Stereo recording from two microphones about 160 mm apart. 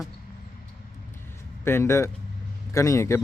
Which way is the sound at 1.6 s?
15° left (ahead or behind).